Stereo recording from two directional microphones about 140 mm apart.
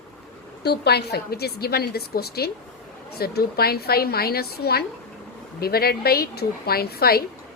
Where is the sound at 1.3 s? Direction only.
90° left.